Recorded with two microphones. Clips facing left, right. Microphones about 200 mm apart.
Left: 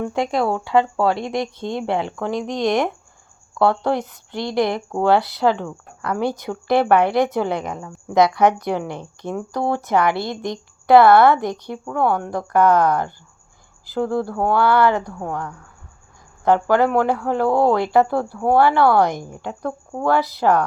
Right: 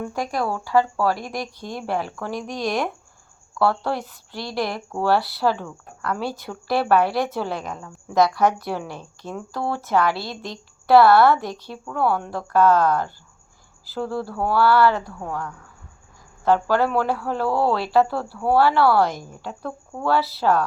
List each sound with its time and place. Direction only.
0.1 s speech: 25° left (ahead or behind)